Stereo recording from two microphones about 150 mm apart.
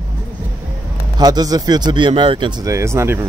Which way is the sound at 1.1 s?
25° right (ahead or behind).